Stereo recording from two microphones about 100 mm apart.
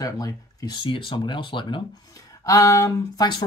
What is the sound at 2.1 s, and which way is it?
Speech, 35° left (ahead or behind).